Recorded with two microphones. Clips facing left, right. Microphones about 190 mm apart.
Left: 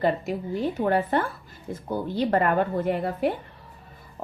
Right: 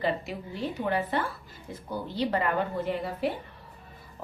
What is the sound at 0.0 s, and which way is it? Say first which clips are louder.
A woman's voice: left 5 dB; 45° left (ahead or behind).